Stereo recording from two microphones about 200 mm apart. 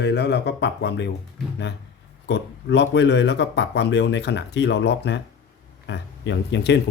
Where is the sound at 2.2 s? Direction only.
60° left (ahead or behind).